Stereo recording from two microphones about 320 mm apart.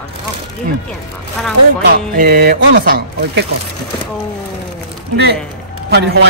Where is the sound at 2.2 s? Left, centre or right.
Right.